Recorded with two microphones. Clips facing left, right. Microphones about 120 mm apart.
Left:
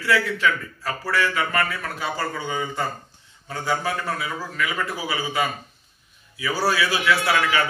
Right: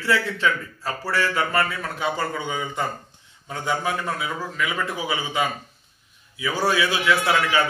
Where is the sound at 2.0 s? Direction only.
15° right (ahead or behind).